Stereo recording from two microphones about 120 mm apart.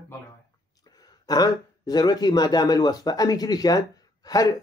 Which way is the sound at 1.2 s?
35° left (ahead or behind).